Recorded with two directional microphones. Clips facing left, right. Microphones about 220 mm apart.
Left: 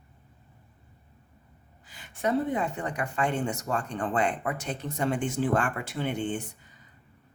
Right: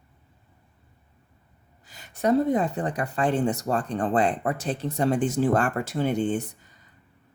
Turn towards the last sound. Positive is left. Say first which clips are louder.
# right 6 dB
turn(degrees=-40)  # may be behind; listen again after turning